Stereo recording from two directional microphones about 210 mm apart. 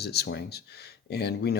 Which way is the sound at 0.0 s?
50° left (ahead or behind).